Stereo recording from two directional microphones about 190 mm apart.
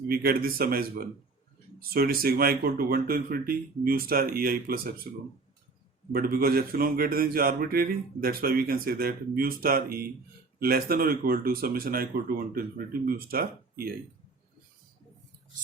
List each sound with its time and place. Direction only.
0.1 s speech: 50° right (ahead or behind)
6.1 s speech: 50° right (ahead or behind)